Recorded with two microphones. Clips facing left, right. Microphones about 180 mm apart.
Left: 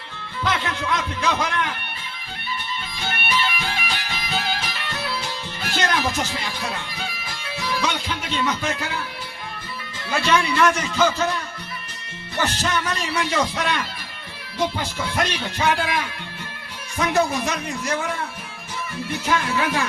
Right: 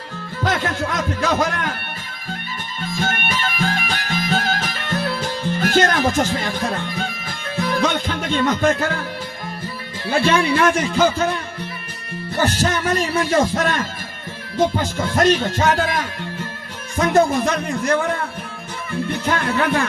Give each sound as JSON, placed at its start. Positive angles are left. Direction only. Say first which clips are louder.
{"t": 0.4, "sound": "speech", "louder": "right 3 dB", "side_deg": -45}
{"t": 2.8, "sound": "music", "louder": "right 6 dB", "side_deg": -45}
{"t": 10.1, "sound": "speech", "louder": "right 4 dB", "side_deg": -30}
{"t": 12.4, "sound": "a man's voice", "louder": "right 4 dB", "side_deg": -45}